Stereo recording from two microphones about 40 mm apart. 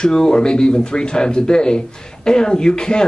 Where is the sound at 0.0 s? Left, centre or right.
Centre.